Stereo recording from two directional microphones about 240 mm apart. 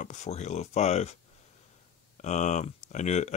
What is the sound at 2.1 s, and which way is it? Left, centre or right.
Speech, left.